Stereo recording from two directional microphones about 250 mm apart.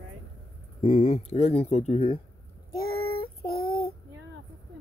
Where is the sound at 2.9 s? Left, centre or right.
Left.